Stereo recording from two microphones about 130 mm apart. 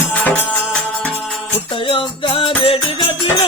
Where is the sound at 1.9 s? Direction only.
40° left (ahead or behind).